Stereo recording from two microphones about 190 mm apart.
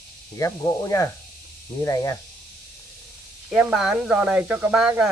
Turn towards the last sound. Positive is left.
turn(degrees=-5)  # may be behind; listen again after turning